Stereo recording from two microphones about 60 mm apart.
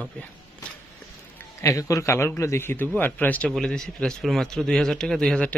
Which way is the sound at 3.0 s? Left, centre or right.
Left.